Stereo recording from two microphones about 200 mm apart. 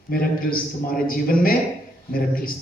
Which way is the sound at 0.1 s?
45° left (ahead or behind).